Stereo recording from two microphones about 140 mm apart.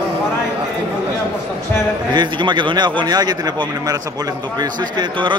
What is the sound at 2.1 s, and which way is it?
A man's voice, 35° right (ahead or behind).